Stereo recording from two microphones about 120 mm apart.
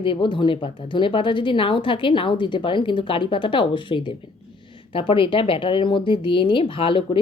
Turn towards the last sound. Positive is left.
turn(degrees=45)  # may be behind; listen again after turning